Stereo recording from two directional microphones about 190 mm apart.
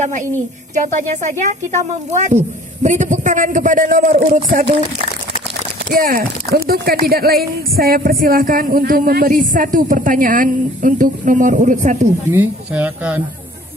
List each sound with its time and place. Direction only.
0.0 s a man's voice: 40° right (ahead or behind)
5.9 s speech: 50° right (ahead or behind)
12.3 s speech: 10° right (ahead or behind)